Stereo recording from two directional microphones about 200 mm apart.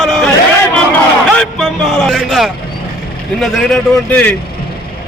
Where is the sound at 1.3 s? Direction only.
Centre (ahead or behind).